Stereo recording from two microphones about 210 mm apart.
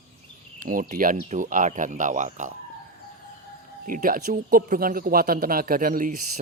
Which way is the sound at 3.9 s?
40° right (ahead or behind).